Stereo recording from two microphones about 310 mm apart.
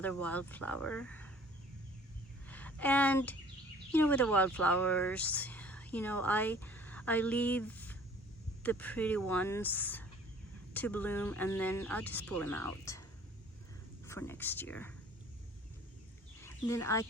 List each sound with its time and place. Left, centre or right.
0.0 s speech: centre
2.5 s a woman's voice: centre
16.4 s speech: centre